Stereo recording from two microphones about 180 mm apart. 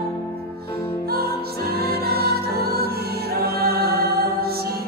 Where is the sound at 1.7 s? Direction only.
60° right (ahead or behind).